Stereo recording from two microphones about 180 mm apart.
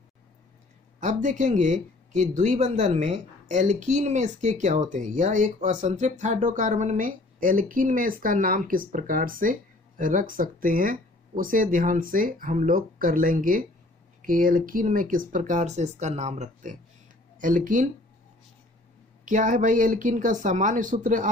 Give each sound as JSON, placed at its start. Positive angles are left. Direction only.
{"t": 0.9, "sound": "speech", "side_deg": -45}
{"t": 19.2, "sound": "speech", "side_deg": -45}